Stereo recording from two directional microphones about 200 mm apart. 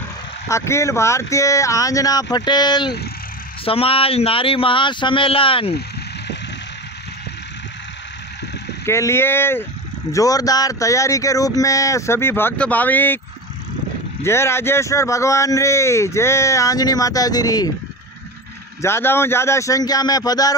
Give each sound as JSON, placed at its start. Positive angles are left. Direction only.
{"t": 0.5, "sound": "speech", "side_deg": 15}
{"t": 8.8, "sound": "speech", "side_deg": 15}
{"t": 14.2, "sound": "speech", "side_deg": 10}
{"t": 18.8, "sound": "speech", "side_deg": 10}